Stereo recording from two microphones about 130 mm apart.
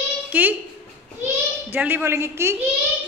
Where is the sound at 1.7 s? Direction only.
15° right (ahead or behind).